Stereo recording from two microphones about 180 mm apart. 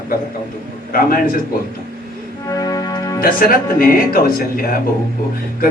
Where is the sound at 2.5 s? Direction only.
20° left (ahead or behind).